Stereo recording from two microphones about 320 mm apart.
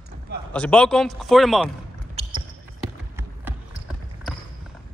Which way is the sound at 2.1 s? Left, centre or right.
Centre.